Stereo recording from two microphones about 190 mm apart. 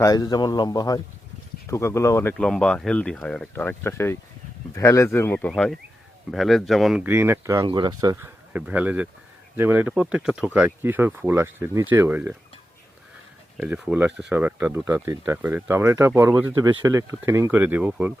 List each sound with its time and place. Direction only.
0.0 s a man's voice: 20° left (ahead or behind)
2.4 s speech: 5° left (ahead or behind)
13.6 s speech: 5° right (ahead or behind)